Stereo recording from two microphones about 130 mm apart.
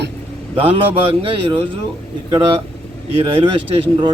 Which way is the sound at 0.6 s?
45° right (ahead or behind).